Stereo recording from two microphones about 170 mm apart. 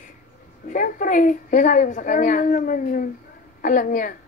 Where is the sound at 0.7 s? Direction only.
50° left (ahead or behind).